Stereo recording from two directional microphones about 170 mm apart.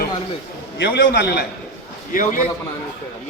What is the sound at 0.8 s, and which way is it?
Speech, 85° left.